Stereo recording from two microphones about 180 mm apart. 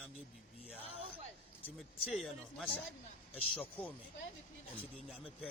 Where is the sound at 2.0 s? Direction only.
Centre (ahead or behind).